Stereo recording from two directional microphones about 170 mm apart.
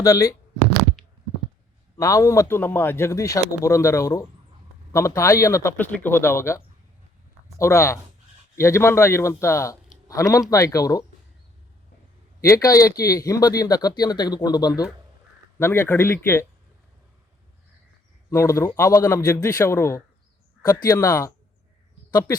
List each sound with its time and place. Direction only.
0.0 s speech: 20° left (ahead or behind)
2.0 s speech: 20° left (ahead or behind)
7.6 s speech: 15° left (ahead or behind)
12.4 s speech: 20° left (ahead or behind)
18.3 s speech: 15° left (ahead or behind)